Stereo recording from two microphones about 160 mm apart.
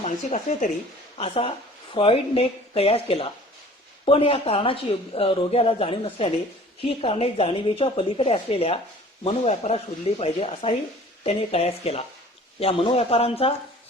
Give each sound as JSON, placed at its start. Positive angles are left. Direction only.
{"t": 0.0, "sound": "speech", "side_deg": 45}
{"t": 1.2, "sound": "speech", "side_deg": 35}